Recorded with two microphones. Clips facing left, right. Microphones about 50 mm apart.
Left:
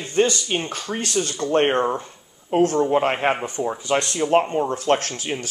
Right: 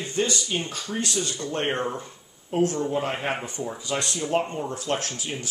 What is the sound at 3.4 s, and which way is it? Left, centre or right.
Speech, left.